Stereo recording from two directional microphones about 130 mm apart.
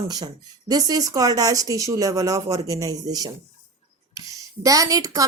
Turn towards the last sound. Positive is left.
turn(degrees=-30)  # may be behind; listen again after turning